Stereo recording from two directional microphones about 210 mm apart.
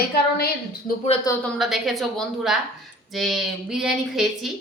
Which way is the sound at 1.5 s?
Centre (ahead or behind).